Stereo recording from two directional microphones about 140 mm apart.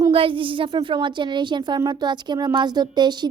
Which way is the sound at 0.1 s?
40° right (ahead or behind).